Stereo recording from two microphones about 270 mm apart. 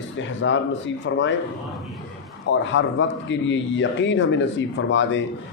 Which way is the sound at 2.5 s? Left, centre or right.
Left.